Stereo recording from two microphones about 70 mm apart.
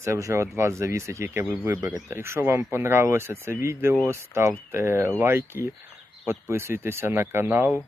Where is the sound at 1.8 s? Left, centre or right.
Right.